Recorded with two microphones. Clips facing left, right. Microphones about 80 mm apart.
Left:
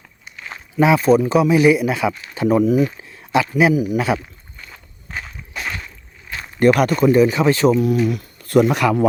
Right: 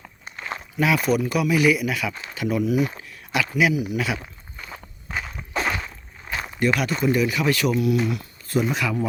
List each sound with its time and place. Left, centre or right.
0.3 s walk: right
0.8 s speech: left
5.5 s walk: right
6.6 s speech: left
7.0 s speech: left
8.0 s speech: left